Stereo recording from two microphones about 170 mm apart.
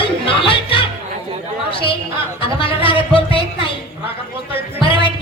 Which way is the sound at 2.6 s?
30° left (ahead or behind).